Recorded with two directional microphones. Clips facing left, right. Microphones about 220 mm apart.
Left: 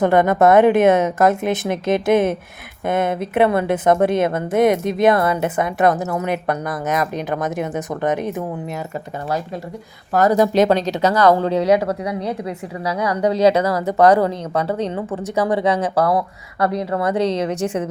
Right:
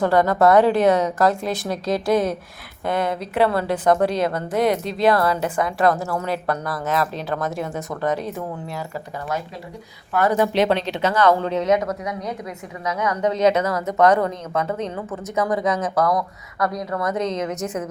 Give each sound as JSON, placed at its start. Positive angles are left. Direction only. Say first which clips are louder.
{"t": 0.0, "sound": "a woman's voice", "louder": "left 3 dB", "side_deg": 20}
{"t": 10.1, "sound": "speech", "louder": "left 4 dB", "side_deg": 40}